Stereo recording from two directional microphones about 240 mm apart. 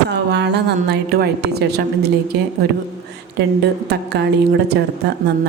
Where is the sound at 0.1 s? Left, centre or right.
Right.